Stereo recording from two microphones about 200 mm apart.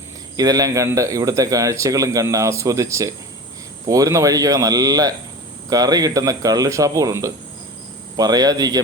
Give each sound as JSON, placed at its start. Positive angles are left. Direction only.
{"t": 0.3, "sound": "a man's voice", "side_deg": -20}